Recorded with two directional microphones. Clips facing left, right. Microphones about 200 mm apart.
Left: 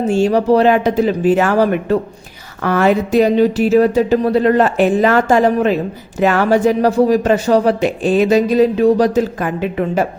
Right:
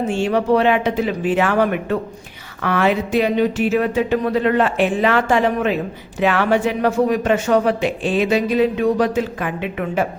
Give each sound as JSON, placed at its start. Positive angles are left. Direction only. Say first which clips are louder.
{"t": 0.0, "sound": "speech", "louder": "left 5 dB", "side_deg": 40}